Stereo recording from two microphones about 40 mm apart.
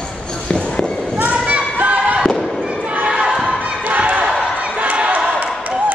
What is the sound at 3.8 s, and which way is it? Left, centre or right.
Basketball bounce, right.